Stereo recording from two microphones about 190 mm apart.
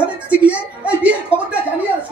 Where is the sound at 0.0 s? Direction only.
5° right (ahead or behind).